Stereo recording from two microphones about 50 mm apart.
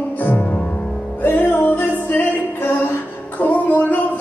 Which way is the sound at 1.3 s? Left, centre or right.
Left.